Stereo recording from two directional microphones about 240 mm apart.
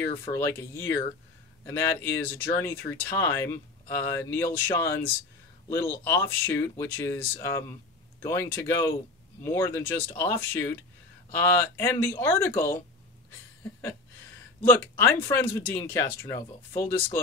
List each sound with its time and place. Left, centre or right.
0.2 s speech: centre
11.7 s speech: centre
14.7 s speech: centre